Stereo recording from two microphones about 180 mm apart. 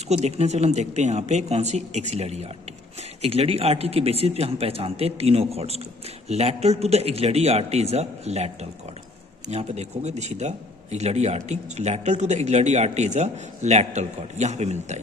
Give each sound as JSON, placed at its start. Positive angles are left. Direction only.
{"t": 0.1, "sound": "speech", "side_deg": -35}